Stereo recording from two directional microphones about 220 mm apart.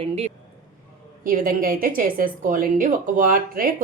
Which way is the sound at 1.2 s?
40° right (ahead or behind).